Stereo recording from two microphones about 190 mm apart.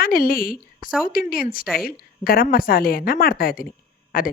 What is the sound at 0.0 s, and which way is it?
A woman's voice, 50° left (ahead or behind).